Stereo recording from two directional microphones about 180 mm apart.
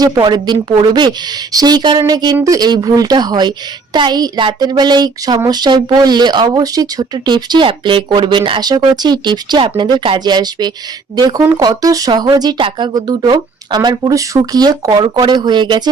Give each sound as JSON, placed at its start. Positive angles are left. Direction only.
{"t": 0.0, "sound": "a woman's voice", "side_deg": -20}